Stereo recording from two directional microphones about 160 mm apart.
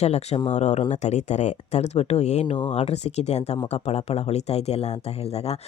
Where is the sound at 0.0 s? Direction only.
40° left (ahead or behind).